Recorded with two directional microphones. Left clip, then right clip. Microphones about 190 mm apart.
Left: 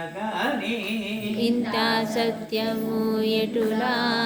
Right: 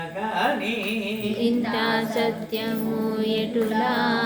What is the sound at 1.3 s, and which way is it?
Music, 25° left (ahead or behind).